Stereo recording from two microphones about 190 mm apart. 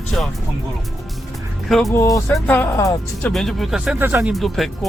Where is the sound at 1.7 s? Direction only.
Centre (ahead or behind).